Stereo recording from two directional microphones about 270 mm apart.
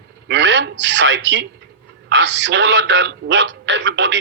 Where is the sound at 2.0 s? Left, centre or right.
Right.